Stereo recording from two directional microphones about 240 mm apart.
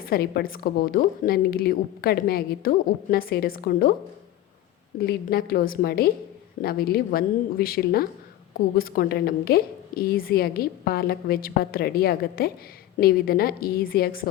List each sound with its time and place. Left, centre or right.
0.0 s a woman's voice: left
4.9 s a woman's voice: left